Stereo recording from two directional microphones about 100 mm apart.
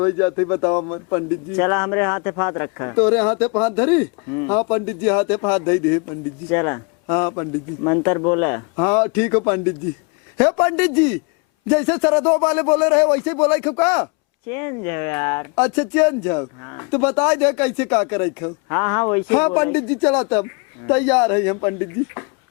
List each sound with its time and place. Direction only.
0.0 s speech: 25° left (ahead or behind)
10.6 s a man's voice: 15° left (ahead or behind)